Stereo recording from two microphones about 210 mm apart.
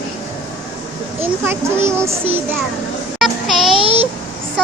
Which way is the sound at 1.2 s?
10° right (ahead or behind).